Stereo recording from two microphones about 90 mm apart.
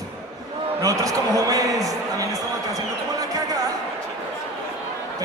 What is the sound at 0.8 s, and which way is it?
A man's voice, 40° right (ahead or behind).